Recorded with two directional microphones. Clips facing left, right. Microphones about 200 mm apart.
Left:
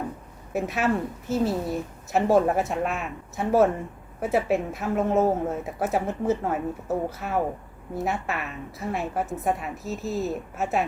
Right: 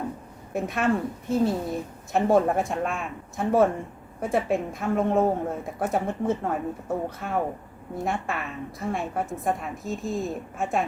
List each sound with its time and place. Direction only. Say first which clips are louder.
0.5 s a woman's voice: even; 5° left (ahead or behind)